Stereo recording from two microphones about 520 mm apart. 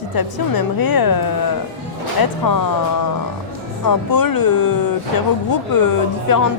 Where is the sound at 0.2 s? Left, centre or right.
Left.